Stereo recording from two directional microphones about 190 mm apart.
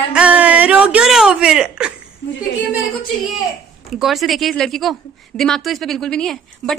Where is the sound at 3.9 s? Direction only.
Centre (ahead or behind).